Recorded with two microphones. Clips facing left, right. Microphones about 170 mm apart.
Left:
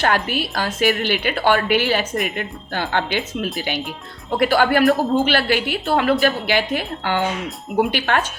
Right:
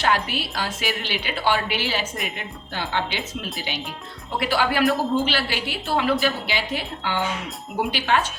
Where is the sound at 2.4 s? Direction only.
55° left (ahead or behind).